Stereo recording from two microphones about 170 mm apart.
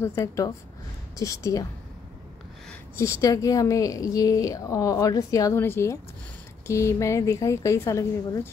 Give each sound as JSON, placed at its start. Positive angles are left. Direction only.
{"t": 0.0, "sound": "a woman's voice", "side_deg": 15}
{"t": 3.0, "sound": "a woman's voice", "side_deg": 20}